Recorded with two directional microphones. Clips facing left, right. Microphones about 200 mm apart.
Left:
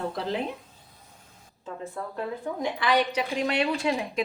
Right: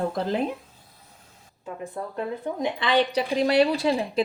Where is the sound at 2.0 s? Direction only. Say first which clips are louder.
Right 3 dB; 20° right (ahead or behind).